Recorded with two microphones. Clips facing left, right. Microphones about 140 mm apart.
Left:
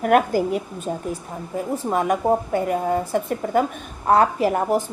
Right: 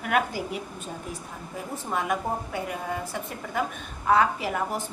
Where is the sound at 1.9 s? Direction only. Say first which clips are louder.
Left 8 dB; 40° left (ahead or behind).